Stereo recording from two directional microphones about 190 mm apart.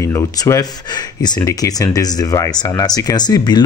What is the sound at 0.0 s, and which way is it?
Speech, 15° left (ahead or behind).